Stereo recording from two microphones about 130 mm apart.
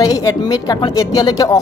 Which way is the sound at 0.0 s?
30° left (ahead or behind).